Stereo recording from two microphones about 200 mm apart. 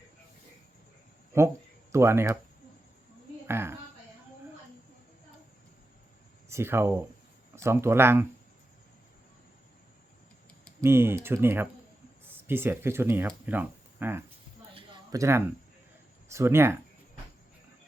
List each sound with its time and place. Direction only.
1.9 s speech: 15° right (ahead or behind)
3.4 s a woman's voice: 10° right (ahead or behind)
6.5 s speech: 10° right (ahead or behind)
10.8 s speech: 10° right (ahead or behind)
14.8 s a sound: 20° right (ahead or behind)
16.3 s speech: 15° right (ahead or behind)